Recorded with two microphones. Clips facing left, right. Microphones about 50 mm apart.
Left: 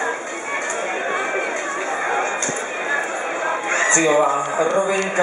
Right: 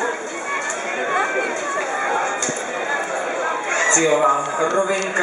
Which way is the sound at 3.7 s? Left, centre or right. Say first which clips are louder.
Even; left.